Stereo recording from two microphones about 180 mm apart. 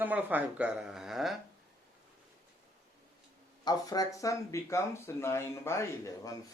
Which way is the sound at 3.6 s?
20° left (ahead or behind).